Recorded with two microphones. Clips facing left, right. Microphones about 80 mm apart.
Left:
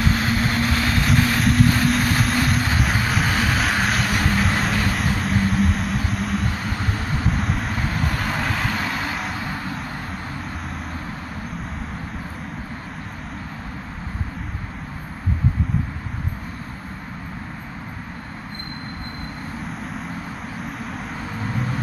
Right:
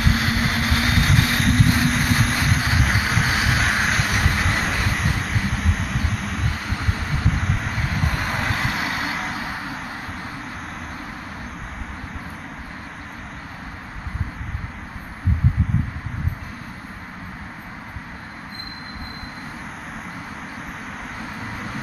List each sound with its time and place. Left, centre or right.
0.0 s vehicle: centre
9.4 s vehicle: centre